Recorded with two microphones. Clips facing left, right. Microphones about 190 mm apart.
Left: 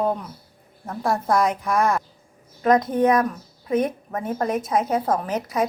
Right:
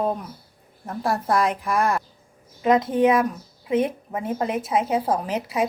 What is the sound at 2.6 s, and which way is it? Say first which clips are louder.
Speech: left 1 dB; 25° right (ahead or behind).